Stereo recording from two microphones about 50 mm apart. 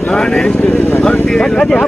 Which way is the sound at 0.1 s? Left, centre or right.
Centre.